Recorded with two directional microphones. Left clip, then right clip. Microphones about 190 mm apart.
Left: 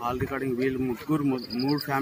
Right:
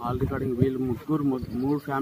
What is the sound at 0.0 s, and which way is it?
A man's voice, 15° left (ahead or behind).